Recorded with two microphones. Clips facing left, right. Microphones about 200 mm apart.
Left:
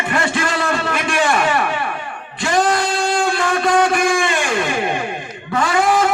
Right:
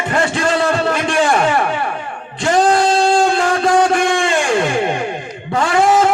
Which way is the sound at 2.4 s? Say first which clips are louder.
Right 4 dB; 35° right (ahead or behind).